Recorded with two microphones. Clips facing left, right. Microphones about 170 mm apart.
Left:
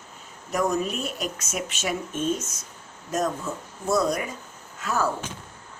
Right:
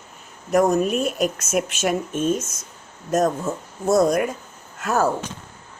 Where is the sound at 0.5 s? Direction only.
45° right (ahead or behind).